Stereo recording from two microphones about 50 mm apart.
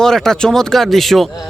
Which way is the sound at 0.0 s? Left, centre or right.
Centre.